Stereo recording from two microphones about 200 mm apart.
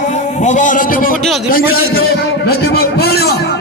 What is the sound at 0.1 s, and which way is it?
A man's voice, 35° left (ahead or behind).